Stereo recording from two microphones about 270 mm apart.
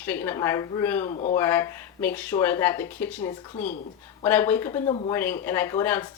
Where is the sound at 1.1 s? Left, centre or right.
Left.